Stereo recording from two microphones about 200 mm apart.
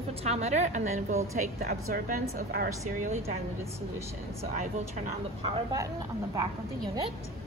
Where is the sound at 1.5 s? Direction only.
50° right (ahead or behind).